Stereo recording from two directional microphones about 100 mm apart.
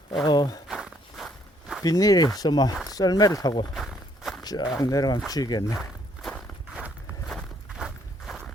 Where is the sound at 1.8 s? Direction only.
35° left (ahead or behind).